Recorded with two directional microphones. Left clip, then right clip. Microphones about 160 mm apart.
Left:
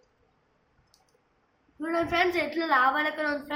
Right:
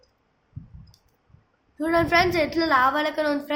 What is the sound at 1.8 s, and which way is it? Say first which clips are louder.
A woman's voice: right 6 dB; 50° right (ahead or behind).